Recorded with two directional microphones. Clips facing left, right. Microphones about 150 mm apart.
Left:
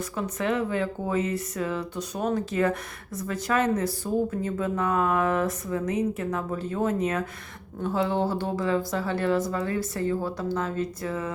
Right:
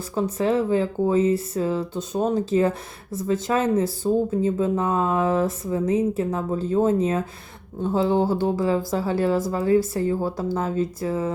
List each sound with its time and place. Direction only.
0.2 s speech: 30° right (ahead or behind)